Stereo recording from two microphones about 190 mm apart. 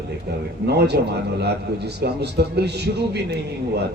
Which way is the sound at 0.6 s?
60° right (ahead or behind).